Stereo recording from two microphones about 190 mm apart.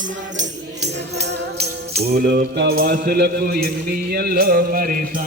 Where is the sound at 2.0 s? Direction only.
55° right (ahead or behind).